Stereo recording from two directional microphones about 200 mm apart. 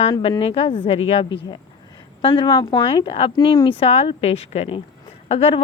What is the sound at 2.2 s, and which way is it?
Speech, 25° left (ahead or behind).